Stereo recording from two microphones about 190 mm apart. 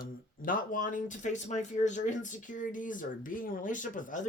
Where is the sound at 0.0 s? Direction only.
45° left (ahead or behind).